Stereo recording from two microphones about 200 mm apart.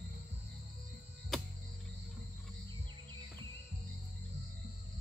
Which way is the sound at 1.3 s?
Centre (ahead or behind).